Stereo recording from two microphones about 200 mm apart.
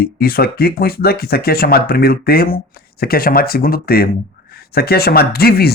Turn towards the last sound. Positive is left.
turn(degrees=50)  # may be behind; listen again after turning